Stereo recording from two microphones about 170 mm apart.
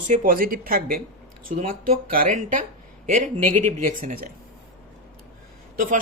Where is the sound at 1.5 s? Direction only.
45° right (ahead or behind).